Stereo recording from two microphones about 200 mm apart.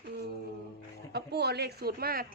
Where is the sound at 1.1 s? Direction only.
55° right (ahead or behind).